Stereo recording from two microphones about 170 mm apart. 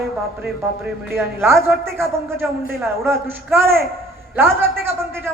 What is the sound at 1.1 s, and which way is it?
A man's voice, 15° right (ahead or behind).